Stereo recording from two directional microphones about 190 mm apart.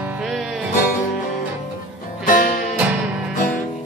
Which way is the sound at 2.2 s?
45° left (ahead or behind).